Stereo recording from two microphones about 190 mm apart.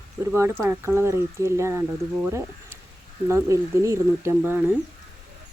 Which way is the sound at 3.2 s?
15° right (ahead or behind).